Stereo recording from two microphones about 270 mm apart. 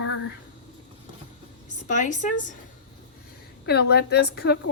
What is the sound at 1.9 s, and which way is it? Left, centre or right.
Speech, left.